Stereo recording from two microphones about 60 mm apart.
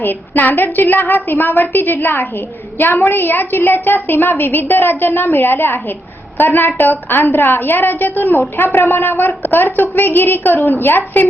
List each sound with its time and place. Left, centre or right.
0.0 s a woman's voice: left